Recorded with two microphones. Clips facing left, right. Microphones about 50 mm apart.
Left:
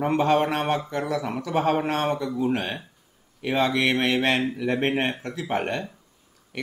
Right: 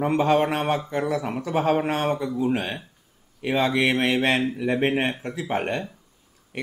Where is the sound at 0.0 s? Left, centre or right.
Centre.